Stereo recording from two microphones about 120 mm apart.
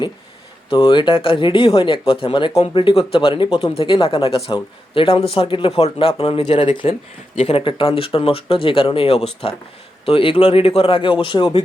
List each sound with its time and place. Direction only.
0.7 s speech: 45° left (ahead or behind)